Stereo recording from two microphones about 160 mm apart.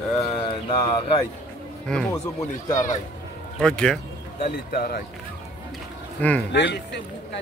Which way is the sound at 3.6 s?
5° left (ahead or behind).